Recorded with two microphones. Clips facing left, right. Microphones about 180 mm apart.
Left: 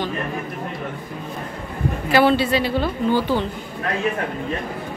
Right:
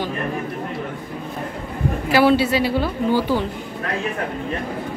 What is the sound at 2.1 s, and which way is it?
A woman's voice, 10° right (ahead or behind).